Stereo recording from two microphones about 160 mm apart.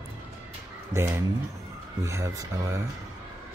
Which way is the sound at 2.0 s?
20° right (ahead or behind).